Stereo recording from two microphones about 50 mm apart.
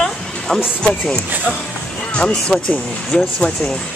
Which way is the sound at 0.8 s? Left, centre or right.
Centre.